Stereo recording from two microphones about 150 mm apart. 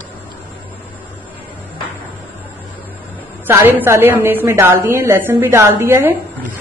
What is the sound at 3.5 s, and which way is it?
A woman's voice, 15° right (ahead or behind).